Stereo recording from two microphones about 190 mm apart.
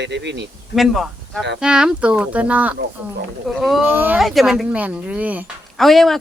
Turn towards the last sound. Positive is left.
turn(degrees=0)  # may be behind; listen again after turning